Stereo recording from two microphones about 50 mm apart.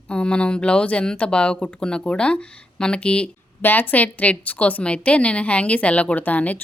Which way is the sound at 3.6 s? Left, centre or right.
Left.